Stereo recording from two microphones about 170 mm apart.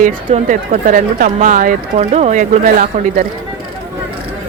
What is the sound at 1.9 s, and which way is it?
Speech, 40° right (ahead or behind).